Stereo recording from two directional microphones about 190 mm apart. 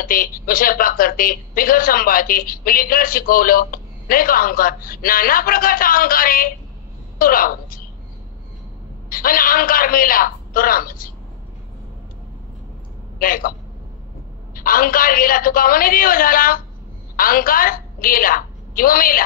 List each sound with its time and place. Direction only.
0.0 s a woman's voice: 50° left (ahead or behind)
9.1 s a woman's voice: 50° left (ahead or behind)
13.2 s a woman's voice: 50° left (ahead or behind)
14.5 s a woman's voice: 50° left (ahead or behind)